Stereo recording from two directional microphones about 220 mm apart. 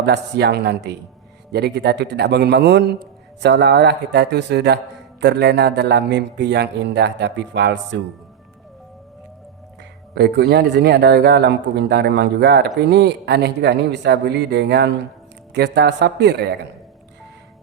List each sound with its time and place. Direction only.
0.0 s speech: 50° right (ahead or behind)
10.5 s speech: 45° right (ahead or behind)